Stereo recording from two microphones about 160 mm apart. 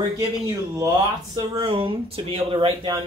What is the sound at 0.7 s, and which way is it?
Speech, 25° right (ahead or behind).